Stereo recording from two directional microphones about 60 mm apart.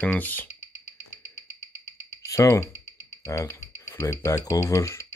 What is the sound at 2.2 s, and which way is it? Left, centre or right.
Speech, left.